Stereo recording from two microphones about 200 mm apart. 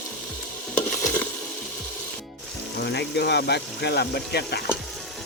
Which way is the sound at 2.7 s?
55° left (ahead or behind).